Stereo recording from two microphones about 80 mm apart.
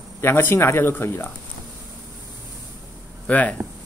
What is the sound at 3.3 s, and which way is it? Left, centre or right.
Speech, centre.